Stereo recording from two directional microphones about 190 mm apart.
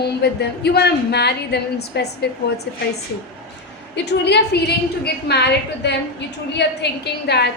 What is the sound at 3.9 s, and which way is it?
A woman's voice, 65° left (ahead or behind).